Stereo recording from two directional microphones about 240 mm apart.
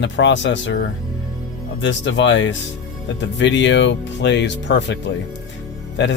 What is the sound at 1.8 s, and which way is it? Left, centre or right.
Speech, left.